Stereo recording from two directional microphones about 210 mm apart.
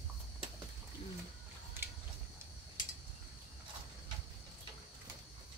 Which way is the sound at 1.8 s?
10° right (ahead or behind).